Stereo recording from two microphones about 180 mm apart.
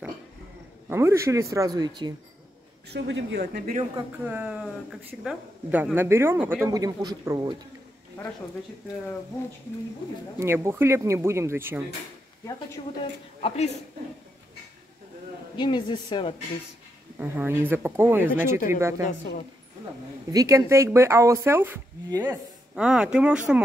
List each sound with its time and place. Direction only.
0.8 s speech: 15° right (ahead or behind)
2.9 s speech: 75° right (ahead or behind); by 3.8 s 55° right (ahead or behind)
4.3 s speech: 5° right (ahead or behind)
10.4 s speech: 15° right (ahead or behind)
15.5 s speech: 25° left (ahead or behind)
17.2 s speech: 10° right (ahead or behind)
19.0 s a woman's voice: 50° left (ahead or behind)
20.3 s speech: 15° right (ahead or behind)